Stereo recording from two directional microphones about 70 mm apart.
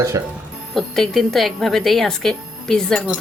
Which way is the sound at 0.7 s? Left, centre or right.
Centre.